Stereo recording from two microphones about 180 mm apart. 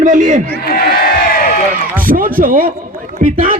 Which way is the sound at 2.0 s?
50° right (ahead or behind).